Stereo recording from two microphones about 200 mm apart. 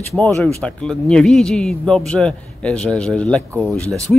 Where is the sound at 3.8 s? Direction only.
15° right (ahead or behind).